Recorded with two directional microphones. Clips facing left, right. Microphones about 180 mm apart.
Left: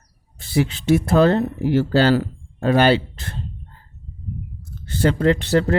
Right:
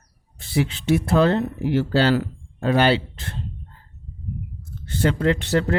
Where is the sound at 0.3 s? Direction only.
40° left (ahead or behind).